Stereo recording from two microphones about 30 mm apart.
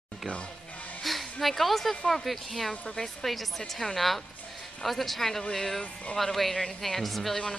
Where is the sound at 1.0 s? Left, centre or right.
Centre.